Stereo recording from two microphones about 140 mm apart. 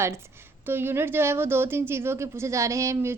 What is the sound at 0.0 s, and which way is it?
A woman's voice, 20° right (ahead or behind).